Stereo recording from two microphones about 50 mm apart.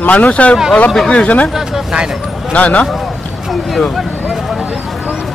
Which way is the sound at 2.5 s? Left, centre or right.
Left.